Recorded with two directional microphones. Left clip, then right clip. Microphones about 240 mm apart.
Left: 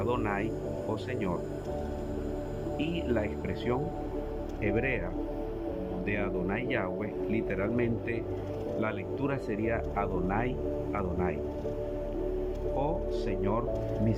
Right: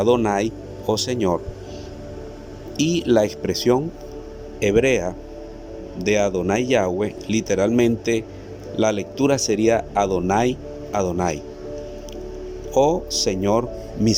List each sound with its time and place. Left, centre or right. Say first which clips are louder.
0.0 s a man's voice: right 13 dB; right
2.7 s a man's voice: right 14 dB; right
12.7 s a man's voice: right 15 dB; right